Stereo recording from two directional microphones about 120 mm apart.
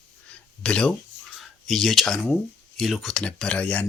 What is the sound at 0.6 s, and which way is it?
Speech, 10° left (ahead or behind).